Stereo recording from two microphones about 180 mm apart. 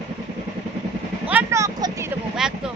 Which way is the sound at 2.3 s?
5° right (ahead or behind).